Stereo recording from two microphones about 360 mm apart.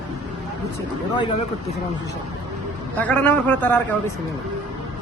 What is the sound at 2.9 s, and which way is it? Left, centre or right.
Speech, centre.